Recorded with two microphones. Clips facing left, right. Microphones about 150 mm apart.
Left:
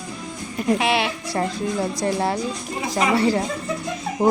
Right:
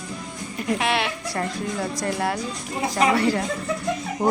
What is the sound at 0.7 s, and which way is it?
Speech, 5° left (ahead or behind).